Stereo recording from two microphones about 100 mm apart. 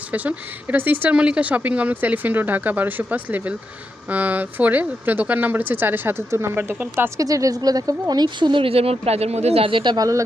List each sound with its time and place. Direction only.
0.1 s speech: 15° right (ahead or behind)
7.2 s speech: 35° right (ahead or behind); by 10.0 s 55° right (ahead or behind)
10.0 s speech: 35° right (ahead or behind)